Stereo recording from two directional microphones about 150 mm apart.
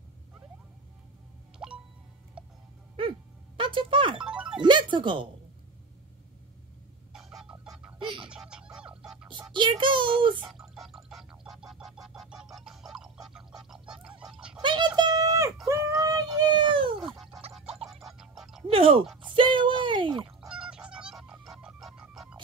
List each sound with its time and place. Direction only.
3.0 s music: 35° right (ahead or behind)
4.2 s music: 5° right (ahead or behind)
4.6 s speech: 30° right (ahead or behind)
7.1 s music: 5° right (ahead or behind)
8.0 s music: 35° right (ahead or behind)
8.3 s music: 5° right (ahead or behind)
9.5 s a sound: 35° right (ahead or behind)
10.5 s pig: centre (ahead or behind)
12.5 s a sound: centre (ahead or behind)
14.6 s a sound: 30° right (ahead or behind)
17.0 s music: centre (ahead or behind)
18.7 s speech: 40° right (ahead or behind)
19.3 s a sound: 35° right (ahead or behind)
20.2 s music: 5° right (ahead or behind)